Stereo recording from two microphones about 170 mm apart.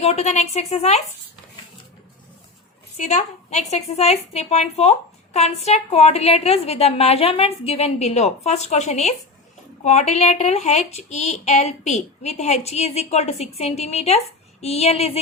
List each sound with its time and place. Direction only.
0.0 s a woman's voice: 40° left (ahead or behind)
3.0 s a woman's voice: 45° left (ahead or behind)